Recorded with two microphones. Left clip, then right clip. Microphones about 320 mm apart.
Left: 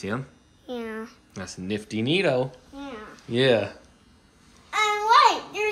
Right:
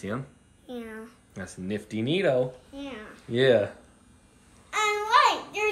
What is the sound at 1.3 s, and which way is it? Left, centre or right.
Speech, centre.